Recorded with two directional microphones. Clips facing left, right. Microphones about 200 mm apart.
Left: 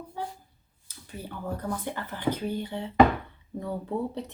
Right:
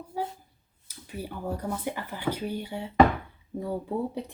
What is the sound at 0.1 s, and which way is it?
Speech, 10° right (ahead or behind).